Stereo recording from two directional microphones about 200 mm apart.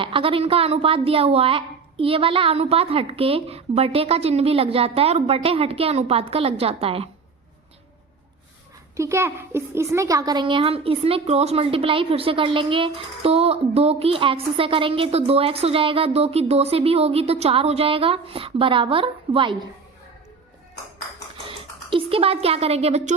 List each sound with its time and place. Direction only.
0.0 s a woman's voice: 25° right (ahead or behind)
9.0 s a woman's voice: 15° right (ahead or behind)
21.8 s a woman's voice: 25° right (ahead or behind)